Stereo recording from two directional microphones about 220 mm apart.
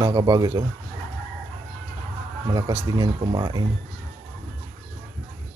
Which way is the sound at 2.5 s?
15° right (ahead or behind).